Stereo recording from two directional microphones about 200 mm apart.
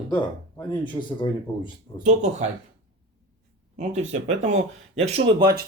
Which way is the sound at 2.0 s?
35° right (ahead or behind).